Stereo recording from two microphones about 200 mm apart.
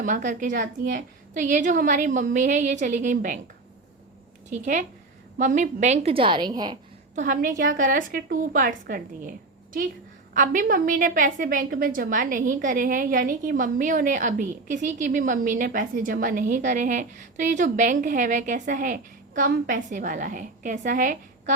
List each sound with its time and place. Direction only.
0.0 s a woman's voice: 40° right (ahead or behind)
4.6 s a woman's voice: 40° right (ahead or behind); by 6.7 s 20° right (ahead or behind)
7.2 s a woman's voice: 45° right (ahead or behind)
10.3 s a woman's voice: 40° right (ahead or behind)